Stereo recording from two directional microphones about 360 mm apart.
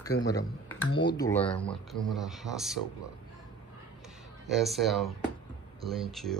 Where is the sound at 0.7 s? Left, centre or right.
Centre.